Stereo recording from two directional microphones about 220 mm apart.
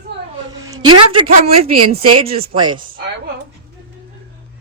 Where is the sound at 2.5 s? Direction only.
20° right (ahead or behind).